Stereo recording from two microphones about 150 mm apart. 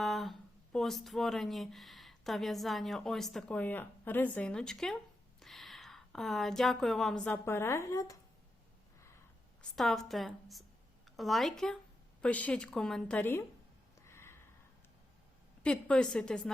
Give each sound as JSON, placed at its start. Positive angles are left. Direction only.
{"t": 0.0, "sound": "speech", "side_deg": 0}
{"t": 7.4, "sound": "a woman's voice", "side_deg": 15}
{"t": 9.6, "sound": "a woman's voice", "side_deg": 0}
{"t": 14.0, "sound": "snort", "side_deg": 15}
{"t": 15.6, "sound": "speech", "side_deg": 5}